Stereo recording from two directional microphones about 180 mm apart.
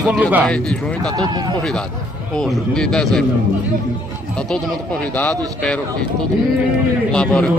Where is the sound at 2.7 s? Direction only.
5° left (ahead or behind).